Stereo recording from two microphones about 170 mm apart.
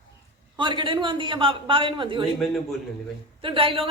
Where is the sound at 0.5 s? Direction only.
25° right (ahead or behind).